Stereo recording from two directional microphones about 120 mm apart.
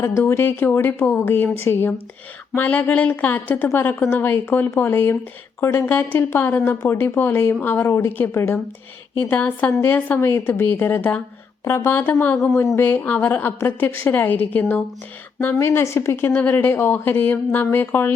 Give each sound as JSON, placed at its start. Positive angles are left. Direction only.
{"t": 0.0, "sound": "a woman's voice", "side_deg": 20}